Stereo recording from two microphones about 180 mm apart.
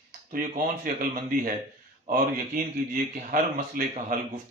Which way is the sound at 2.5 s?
50° right (ahead or behind).